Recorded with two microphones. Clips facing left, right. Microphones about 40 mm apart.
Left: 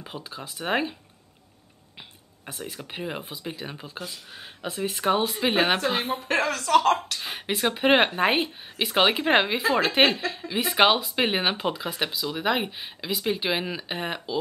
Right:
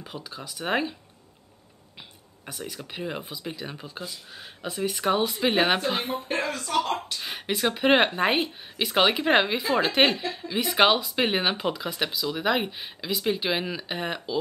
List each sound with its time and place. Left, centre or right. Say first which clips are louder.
0.0 s speech: left 1 dB; left
0.7 s speech: left 1 dB; centre
2.4 s speech: even; centre
6.2 s a woman's voice: left 4 dB; left
7.2 s speech: even; centre